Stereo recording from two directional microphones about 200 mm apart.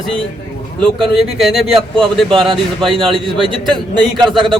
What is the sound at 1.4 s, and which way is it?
Speech, centre (ahead or behind).